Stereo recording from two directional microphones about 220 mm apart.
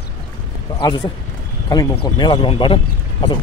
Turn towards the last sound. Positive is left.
turn(degrees=20)  # may be behind; listen again after turning